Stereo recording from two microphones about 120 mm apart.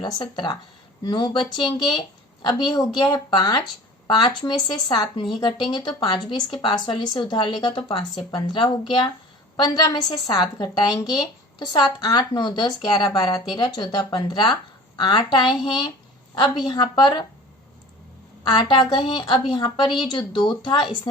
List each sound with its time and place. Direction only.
0.0 s a woman's voice: 40° left (ahead or behind)
18.4 s speech: 40° left (ahead or behind)